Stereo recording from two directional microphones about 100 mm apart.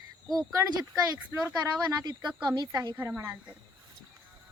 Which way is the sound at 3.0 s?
30° right (ahead or behind).